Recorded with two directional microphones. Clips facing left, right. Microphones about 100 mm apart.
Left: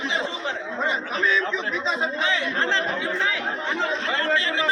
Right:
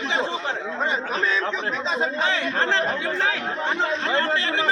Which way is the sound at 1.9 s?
50° right (ahead or behind).